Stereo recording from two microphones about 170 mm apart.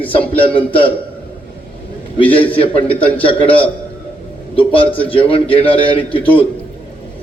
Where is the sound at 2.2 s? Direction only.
30° left (ahead or behind).